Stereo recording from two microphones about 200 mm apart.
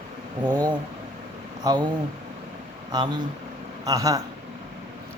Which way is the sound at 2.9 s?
20° right (ahead or behind).